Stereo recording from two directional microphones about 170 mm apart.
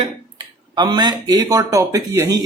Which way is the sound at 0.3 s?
25° right (ahead or behind).